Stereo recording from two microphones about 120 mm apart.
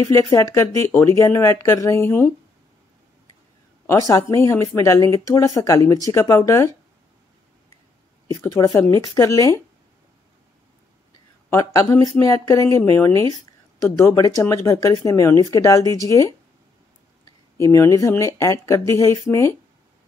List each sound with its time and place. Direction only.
0.0 s speech: 25° left (ahead or behind)
3.8 s speech: 25° left (ahead or behind)
8.3 s speech: 25° left (ahead or behind)
11.5 s speech: 25° left (ahead or behind)
17.6 s speech: 25° left (ahead or behind)